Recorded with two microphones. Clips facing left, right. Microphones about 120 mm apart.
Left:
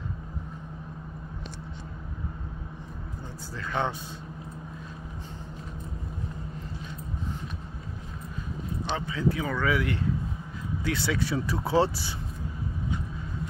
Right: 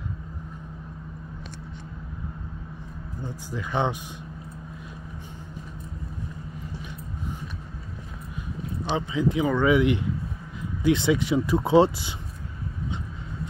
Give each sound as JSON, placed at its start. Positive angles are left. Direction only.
{"t": 3.2, "sound": "a man's voice", "side_deg": -15}
{"t": 8.8, "sound": "speech", "side_deg": -15}